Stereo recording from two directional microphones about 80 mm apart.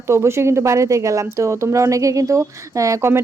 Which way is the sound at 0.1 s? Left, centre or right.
Right.